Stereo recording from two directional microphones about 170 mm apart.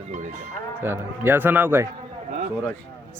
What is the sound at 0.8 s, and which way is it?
Speech, 15° right (ahead or behind).